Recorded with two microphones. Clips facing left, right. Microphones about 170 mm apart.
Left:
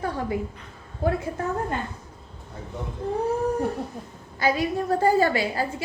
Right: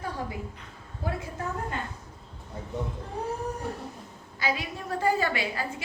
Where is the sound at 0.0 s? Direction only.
65° left (ahead or behind).